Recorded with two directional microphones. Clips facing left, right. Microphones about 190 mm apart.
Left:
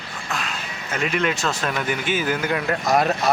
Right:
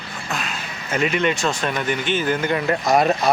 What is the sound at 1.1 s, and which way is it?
Speech, centre (ahead or behind).